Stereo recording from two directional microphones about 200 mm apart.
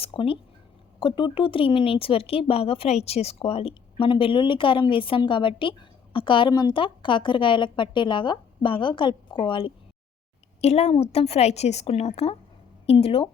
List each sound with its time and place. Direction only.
0.0 s a woman's voice: 25° left (ahead or behind)